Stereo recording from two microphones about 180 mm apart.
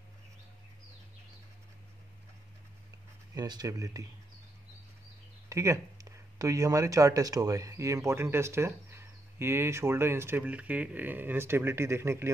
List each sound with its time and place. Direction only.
3.3 s speech: 20° right (ahead or behind)
5.5 s speech: 15° right (ahead or behind)